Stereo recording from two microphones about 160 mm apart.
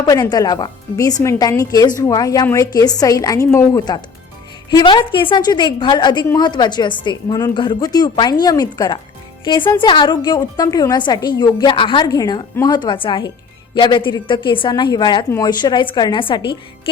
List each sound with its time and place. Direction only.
0.0 s a woman's voice: 25° left (ahead or behind)